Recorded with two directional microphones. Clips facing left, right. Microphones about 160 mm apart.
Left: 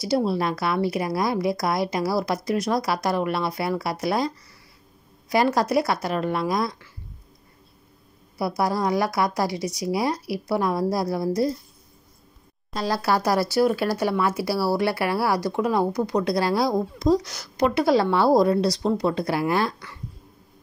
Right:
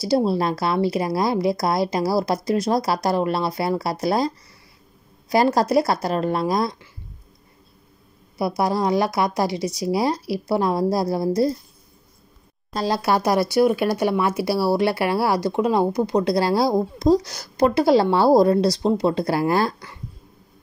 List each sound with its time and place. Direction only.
0.0 s speech: 30° right (ahead or behind)
5.3 s speech: 35° right (ahead or behind)
8.4 s speech: 20° right (ahead or behind)
12.7 s speech: 25° right (ahead or behind)